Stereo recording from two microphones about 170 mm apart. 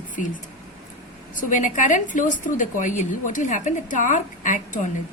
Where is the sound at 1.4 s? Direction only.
50° left (ahead or behind).